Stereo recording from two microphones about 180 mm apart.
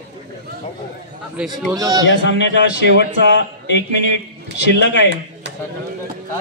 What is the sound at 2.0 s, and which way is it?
A man's voice, 80° left.